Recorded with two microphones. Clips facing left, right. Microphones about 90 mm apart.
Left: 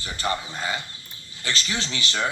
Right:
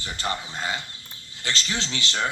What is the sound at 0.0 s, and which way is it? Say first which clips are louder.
Speech: left 2 dB; 10° left (ahead or behind).